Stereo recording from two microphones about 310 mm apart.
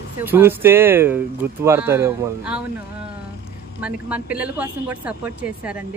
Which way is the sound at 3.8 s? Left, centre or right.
Centre.